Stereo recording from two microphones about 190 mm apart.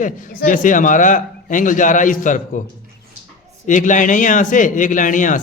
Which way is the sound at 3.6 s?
40° left (ahead or behind).